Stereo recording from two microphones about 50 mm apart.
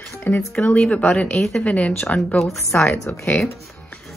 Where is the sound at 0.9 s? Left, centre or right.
Left.